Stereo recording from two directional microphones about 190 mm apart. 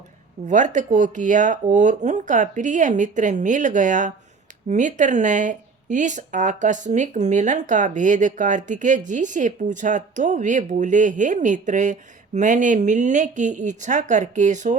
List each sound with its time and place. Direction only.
0.4 s speech: 40° right (ahead or behind)